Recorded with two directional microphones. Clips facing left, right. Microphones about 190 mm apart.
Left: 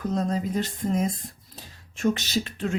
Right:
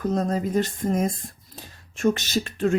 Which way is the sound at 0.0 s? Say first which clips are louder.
Right 2 dB; 50° right (ahead or behind).